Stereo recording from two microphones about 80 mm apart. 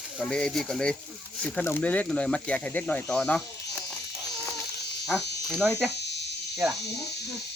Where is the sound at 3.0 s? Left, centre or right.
Centre.